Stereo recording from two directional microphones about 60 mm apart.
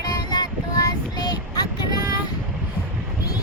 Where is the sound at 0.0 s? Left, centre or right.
Left.